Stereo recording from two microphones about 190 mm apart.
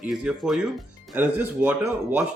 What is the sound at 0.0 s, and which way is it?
Speech, 5° right (ahead or behind).